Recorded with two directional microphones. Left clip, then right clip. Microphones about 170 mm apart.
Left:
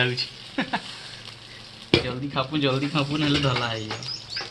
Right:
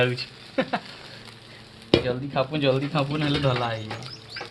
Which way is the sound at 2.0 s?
60° right (ahead or behind).